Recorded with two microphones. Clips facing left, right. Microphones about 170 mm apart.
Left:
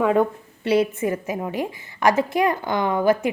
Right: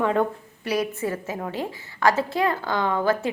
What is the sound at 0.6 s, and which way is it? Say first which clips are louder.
A woman's voice: left 5 dB; 25° left (ahead or behind).